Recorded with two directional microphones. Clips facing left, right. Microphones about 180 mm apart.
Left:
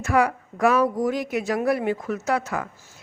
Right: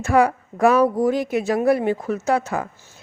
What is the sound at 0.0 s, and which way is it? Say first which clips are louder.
Speech: right 4 dB; 30° right (ahead or behind).